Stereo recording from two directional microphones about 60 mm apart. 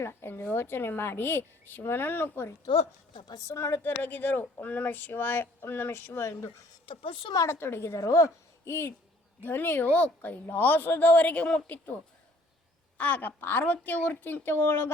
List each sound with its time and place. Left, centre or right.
0.0 s a woman's voice: left
8.0 s speech: left
9.4 s speech: left
11.1 s speech: left
13.0 s speech: left